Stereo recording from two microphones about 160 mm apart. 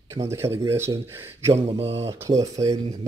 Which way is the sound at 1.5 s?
40° right (ahead or behind).